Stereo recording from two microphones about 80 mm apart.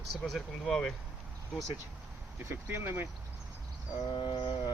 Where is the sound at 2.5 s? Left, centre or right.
Right.